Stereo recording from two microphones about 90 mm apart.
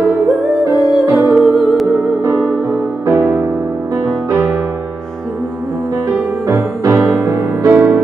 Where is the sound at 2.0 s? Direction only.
15° right (ahead or behind).